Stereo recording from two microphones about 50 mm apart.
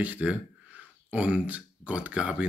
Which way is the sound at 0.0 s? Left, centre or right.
Right.